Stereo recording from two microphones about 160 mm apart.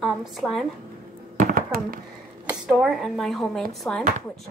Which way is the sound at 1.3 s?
65° right (ahead or behind).